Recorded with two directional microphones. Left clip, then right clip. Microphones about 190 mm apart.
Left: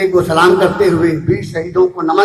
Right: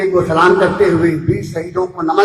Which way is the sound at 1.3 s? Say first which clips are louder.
Left 2 dB; centre (ahead or behind).